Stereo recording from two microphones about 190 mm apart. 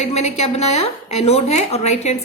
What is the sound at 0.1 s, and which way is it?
A woman's voice, 35° left (ahead or behind).